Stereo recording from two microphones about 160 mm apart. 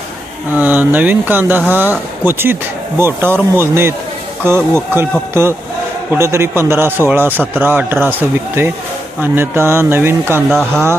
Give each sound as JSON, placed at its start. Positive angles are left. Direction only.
{"t": 0.6, "sound": "speech", "side_deg": -10}